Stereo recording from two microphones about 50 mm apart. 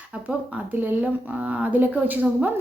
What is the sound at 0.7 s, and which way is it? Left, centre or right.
Speech, right.